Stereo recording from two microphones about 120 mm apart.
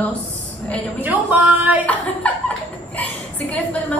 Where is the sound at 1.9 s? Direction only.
10° left (ahead or behind).